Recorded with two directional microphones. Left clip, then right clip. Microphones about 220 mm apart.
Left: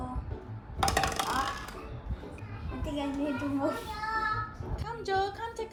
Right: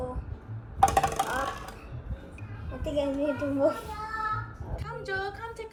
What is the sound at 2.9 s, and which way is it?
Speech, centre (ahead or behind).